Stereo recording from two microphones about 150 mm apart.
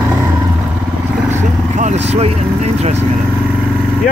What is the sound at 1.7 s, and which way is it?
Vehicle, 50° right (ahead or behind).